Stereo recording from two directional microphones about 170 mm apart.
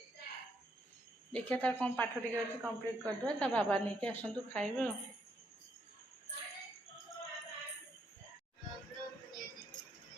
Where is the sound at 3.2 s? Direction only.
5° left (ahead or behind).